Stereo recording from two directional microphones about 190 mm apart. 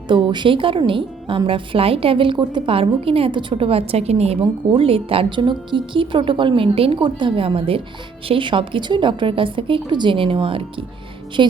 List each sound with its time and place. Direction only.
0.1 s a woman's voice: 25° right (ahead or behind)